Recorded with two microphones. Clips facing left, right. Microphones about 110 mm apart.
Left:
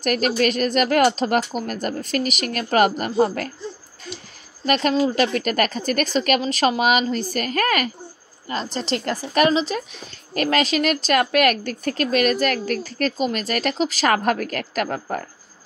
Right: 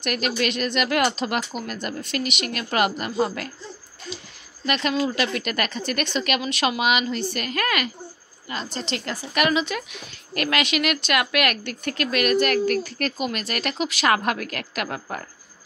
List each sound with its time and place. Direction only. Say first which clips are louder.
0.0 s speech: left 5 dB; 40° left (ahead or behind)
4.6 s speech: left 4 dB; 40° left (ahead or behind)